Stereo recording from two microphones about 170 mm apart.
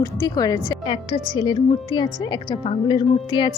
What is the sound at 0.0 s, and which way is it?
A woman's voice, 20° left (ahead or behind).